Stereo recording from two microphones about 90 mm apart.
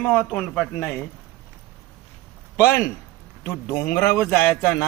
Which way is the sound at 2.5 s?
30° left (ahead or behind).